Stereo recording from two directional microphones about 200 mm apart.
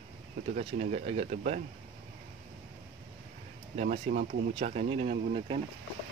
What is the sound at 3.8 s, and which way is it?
Speech, 40° right (ahead or behind).